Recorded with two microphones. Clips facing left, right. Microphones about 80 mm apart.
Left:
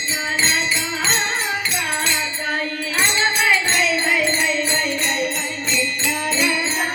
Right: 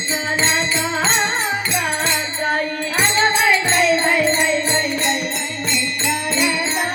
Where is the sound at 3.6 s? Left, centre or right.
Right.